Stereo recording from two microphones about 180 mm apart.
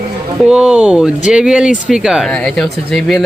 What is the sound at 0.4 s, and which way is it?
Speech, 5° right (ahead or behind).